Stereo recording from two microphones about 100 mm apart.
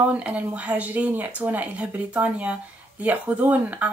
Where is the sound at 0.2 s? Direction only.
15° right (ahead or behind).